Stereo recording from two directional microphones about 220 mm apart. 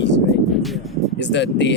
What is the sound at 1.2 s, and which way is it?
Speech, 55° left (ahead or behind).